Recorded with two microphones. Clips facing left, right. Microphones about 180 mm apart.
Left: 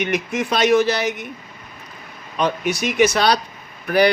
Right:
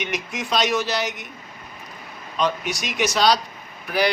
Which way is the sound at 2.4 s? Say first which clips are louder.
Left 4 dB; 55° left (ahead or behind).